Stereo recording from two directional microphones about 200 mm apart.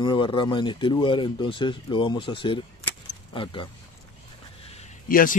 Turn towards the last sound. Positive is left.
turn(degrees=45)  # may be behind; listen again after turning